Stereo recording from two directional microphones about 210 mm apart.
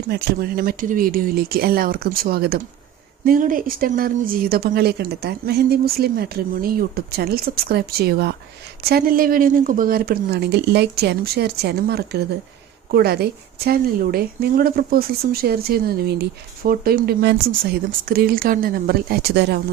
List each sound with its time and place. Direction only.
0.1 s a woman's voice: 45° right (ahead or behind)